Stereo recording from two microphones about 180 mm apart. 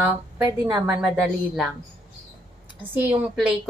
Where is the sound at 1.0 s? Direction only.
5° right (ahead or behind).